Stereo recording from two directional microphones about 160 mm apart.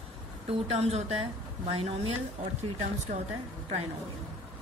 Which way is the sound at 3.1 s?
50° right (ahead or behind).